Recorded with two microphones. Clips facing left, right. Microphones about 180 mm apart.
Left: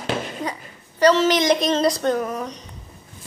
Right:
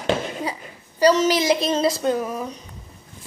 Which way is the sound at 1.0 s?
5° right (ahead or behind).